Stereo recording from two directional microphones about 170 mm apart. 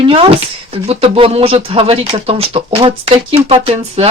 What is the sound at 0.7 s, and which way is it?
Speech, 35° right (ahead or behind).